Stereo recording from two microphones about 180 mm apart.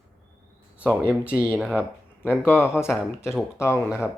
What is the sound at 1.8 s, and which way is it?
Speech, 10° left (ahead or behind).